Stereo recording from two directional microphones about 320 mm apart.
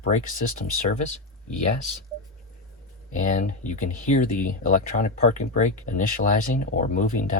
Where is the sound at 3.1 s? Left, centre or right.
Left.